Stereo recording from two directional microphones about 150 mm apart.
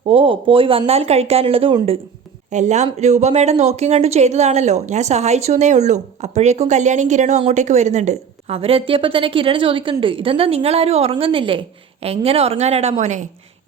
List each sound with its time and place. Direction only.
0.1 s speech: 35° right (ahead or behind)
2.5 s speech: 50° right (ahead or behind)